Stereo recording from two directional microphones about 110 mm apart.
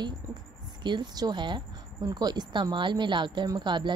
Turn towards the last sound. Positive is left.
turn(degrees=-45)  # may be behind; listen again after turning